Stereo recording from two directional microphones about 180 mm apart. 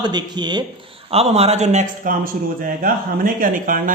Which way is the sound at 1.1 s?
35° right (ahead or behind).